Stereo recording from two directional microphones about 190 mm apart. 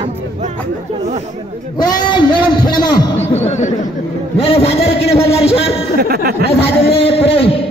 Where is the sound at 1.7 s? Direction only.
20° left (ahead or behind).